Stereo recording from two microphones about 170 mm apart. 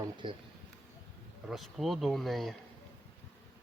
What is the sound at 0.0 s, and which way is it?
Speech, 25° right (ahead or behind).